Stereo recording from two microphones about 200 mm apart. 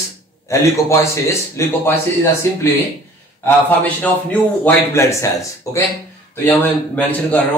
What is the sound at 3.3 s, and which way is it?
A man's voice, 10° left (ahead or behind).